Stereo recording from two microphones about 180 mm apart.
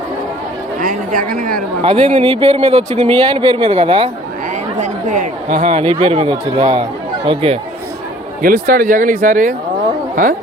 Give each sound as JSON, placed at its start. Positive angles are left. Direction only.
{"t": 0.8, "sound": "speech", "side_deg": -50}
{"t": 1.8, "sound": "speech", "side_deg": -30}
{"t": 4.8, "sound": "speech", "side_deg": -45}
{"t": 8.4, "sound": "speech", "side_deg": -55}